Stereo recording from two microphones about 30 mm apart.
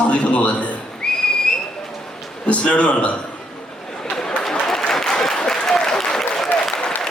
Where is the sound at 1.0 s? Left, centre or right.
Left.